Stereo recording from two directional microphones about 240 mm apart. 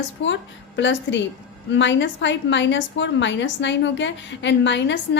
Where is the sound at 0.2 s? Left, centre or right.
Left.